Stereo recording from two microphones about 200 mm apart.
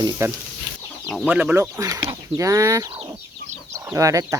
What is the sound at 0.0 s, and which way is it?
Speech, 15° right (ahead or behind).